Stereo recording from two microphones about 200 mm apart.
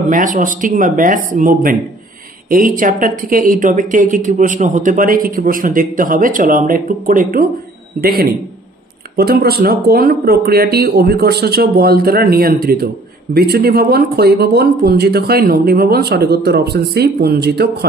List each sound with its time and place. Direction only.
0.1 s speech: 40° right (ahead or behind)